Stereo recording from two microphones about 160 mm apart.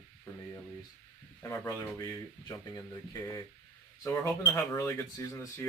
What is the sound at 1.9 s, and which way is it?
Speech, 25° left (ahead or behind).